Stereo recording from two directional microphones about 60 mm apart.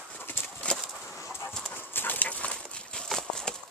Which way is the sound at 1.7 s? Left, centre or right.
Left.